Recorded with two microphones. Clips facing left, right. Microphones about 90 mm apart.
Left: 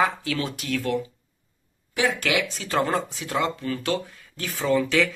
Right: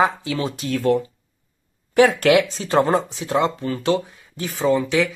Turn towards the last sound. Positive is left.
turn(degrees=-20)  # may be behind; listen again after turning